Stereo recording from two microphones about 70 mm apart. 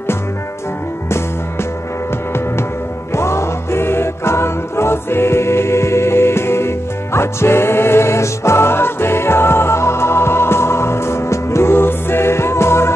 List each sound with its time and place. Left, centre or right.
3.2 s music: left